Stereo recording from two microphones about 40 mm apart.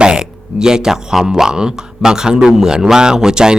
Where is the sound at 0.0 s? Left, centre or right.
Right.